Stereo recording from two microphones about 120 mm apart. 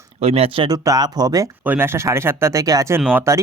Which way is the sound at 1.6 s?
15° right (ahead or behind).